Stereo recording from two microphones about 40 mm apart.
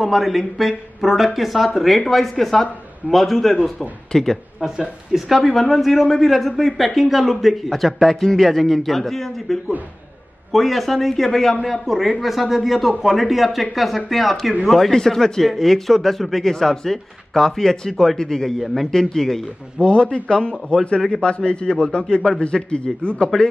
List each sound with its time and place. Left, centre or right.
0.0 s speech: centre
5.1 s speech: centre
14.9 s speech: centre
19.8 s a man's voice: left